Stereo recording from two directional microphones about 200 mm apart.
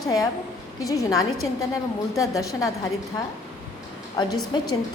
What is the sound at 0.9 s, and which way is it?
A woman's voice, 15° left (ahead or behind).